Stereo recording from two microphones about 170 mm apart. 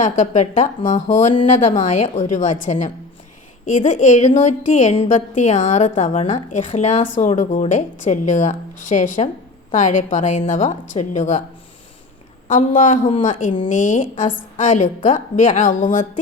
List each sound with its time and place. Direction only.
0.0 s a woman's voice: 45° left (ahead or behind)
12.5 s a woman's voice: 45° left (ahead or behind)